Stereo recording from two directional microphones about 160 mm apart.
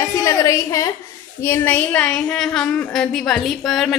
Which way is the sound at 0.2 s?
20° left (ahead or behind).